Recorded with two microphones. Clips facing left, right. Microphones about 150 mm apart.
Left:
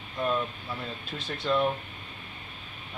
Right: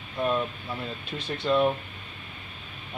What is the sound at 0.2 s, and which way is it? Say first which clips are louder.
Speech: right 2 dB; 10° right (ahead or behind).